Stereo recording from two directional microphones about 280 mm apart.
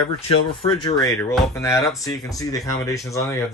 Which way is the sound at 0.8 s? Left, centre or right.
Centre.